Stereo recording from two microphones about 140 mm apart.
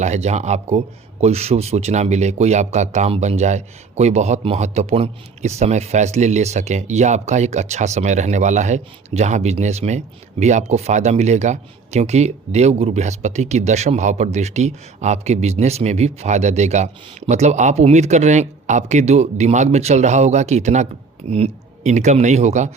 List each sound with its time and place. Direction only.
0.0 s a man's voice: 55° right (ahead or behind)